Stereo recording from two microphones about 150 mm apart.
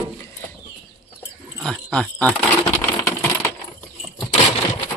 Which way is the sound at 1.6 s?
5° left (ahead or behind).